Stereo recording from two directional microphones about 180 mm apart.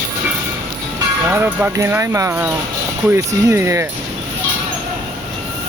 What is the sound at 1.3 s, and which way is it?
Speech, 10° right (ahead or behind).